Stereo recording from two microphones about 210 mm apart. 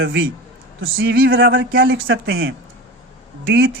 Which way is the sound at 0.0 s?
55° right (ahead or behind).